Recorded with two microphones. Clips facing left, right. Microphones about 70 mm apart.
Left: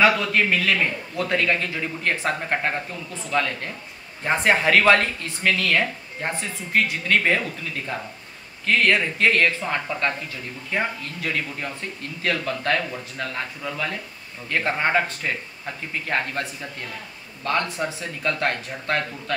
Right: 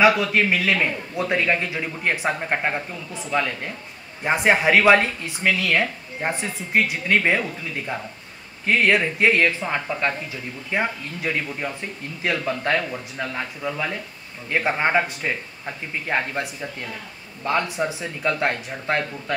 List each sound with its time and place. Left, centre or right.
0.0 s a woman's voice: centre